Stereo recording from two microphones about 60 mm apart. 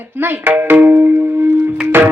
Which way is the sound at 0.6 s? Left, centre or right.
Right.